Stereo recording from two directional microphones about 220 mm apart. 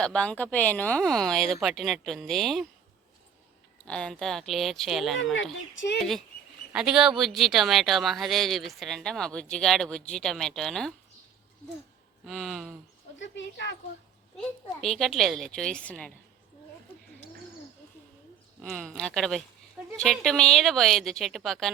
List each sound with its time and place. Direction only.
0.0 s speech: 5° left (ahead or behind)
3.8 s speech: 5° left (ahead or behind)
5.3 s speech: 60° left (ahead or behind)
6.7 s speech: 5° right (ahead or behind)
12.2 s speech: centre (ahead or behind)
13.1 s speech: 55° left (ahead or behind)
14.3 s speech: centre (ahead or behind)
18.6 s speech: 5° left (ahead or behind)